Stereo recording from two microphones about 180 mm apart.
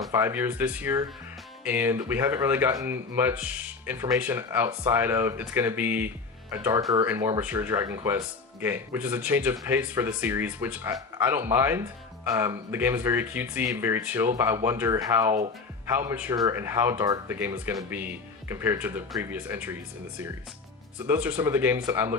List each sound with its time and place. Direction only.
0.1 s speech: 15° right (ahead or behind)
21.1 s speech: 10° right (ahead or behind)